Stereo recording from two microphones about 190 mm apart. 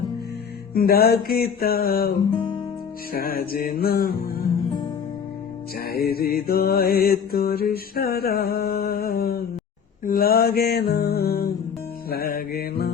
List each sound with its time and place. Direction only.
0.7 s mantra: 50° left (ahead or behind)
5.9 s mantra: 55° left (ahead or behind)